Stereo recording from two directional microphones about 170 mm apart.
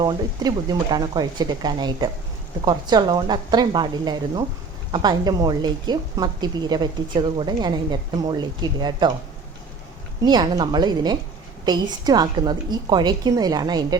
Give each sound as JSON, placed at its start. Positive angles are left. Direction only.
{"t": 0.0, "sound": "a woman's voice", "side_deg": -25}
{"t": 10.2, "sound": "a woman's voice", "side_deg": -25}